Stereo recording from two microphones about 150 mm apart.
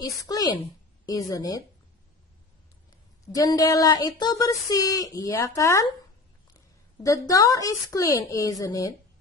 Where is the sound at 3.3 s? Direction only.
25° left (ahead or behind).